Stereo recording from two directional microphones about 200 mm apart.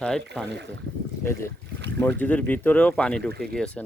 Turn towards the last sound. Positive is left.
turn(degrees=5)  # may be behind; listen again after turning